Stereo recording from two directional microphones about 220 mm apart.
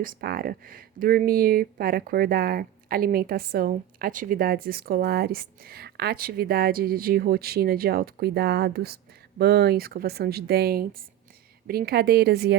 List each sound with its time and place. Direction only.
0.0 s speech: 40° right (ahead or behind)